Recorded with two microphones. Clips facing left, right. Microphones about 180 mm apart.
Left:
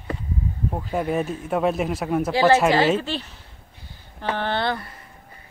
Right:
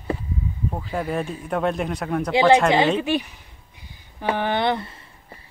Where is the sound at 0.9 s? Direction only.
Centre (ahead or behind).